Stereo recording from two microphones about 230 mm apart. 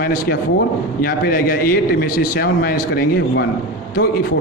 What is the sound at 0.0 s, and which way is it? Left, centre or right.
A man's voice, left.